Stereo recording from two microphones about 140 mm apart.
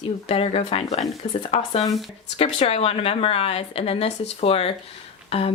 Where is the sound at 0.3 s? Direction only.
45° left (ahead or behind).